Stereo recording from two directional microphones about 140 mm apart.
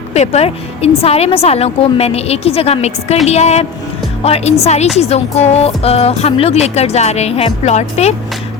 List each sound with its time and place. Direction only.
0.1 s speech: 50° left (ahead or behind)